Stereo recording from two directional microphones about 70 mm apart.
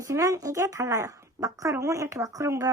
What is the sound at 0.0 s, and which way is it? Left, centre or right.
Speech, right.